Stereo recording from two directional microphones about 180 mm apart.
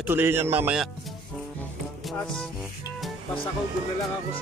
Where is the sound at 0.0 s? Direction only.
10° right (ahead or behind).